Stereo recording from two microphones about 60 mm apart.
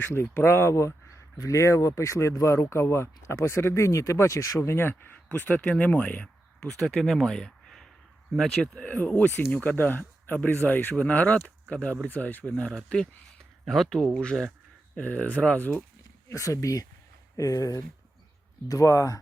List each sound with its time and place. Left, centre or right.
0.1 s speech: left
2.6 s speech: left
5.3 s speech: left
6.1 s speech: centre
8.7 s speech: centre
9.0 s speech: left; by 14.1 s centre
14.1 s speech: centre
16.3 s speech: left